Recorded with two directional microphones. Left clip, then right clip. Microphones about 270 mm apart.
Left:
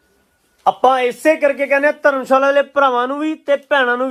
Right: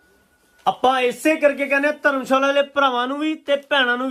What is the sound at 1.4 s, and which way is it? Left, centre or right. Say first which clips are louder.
Speech: left 4 dB; left.